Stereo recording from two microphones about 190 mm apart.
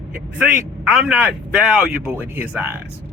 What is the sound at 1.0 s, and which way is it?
Speech, 5° right (ahead or behind).